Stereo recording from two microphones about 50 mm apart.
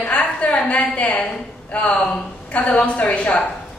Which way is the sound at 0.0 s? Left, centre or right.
Left.